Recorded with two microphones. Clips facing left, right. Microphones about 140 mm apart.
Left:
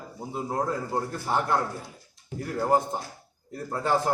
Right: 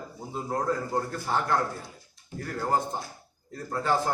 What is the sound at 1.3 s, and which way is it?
A man's voice, 15° left (ahead or behind).